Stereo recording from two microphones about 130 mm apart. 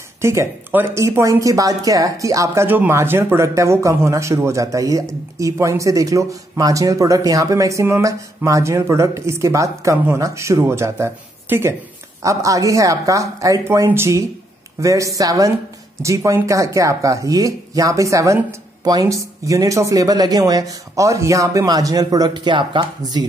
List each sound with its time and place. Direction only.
0.2 s speech: 20° right (ahead or behind)